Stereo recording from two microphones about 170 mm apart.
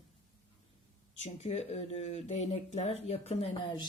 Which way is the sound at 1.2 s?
40° left (ahead or behind).